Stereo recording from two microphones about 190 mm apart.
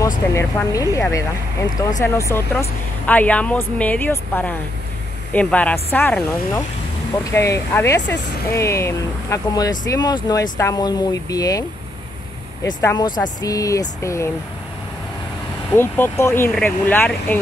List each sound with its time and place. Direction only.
0.3 s speech: 15° left (ahead or behind)
12.8 s speech: 20° left (ahead or behind)
15.7 s speech: 10° left (ahead or behind)